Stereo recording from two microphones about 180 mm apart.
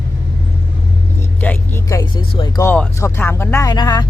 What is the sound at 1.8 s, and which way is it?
Speech, 20° left (ahead or behind).